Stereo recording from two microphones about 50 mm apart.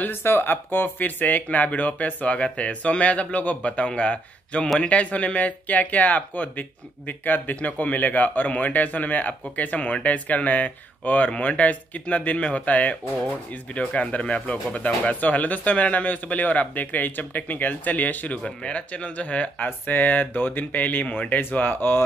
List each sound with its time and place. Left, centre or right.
0.0 s speech: left
18.4 s speech: left